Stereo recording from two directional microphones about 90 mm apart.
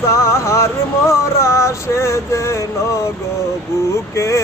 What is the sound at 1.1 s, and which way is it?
Music, 30° left (ahead or behind).